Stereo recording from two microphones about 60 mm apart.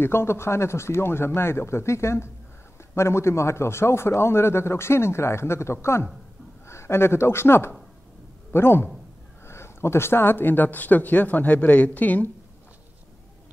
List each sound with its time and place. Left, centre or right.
0.0 s a man's voice: left